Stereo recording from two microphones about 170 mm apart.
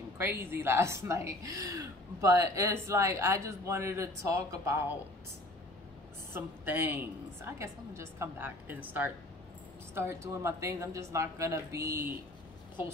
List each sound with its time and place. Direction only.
0.2 s a woman's voice: 15° right (ahead or behind)
6.3 s a woman's voice: 10° right (ahead or behind)